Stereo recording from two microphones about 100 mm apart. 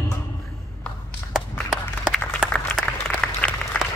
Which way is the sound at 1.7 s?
5° left (ahead or behind).